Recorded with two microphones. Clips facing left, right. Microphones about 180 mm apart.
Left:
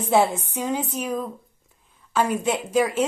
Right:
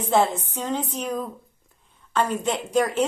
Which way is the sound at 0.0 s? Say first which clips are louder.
Left 1 dB; 10° left (ahead or behind).